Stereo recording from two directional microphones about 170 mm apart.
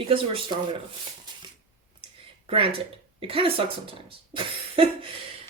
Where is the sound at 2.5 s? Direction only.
35° right (ahead or behind).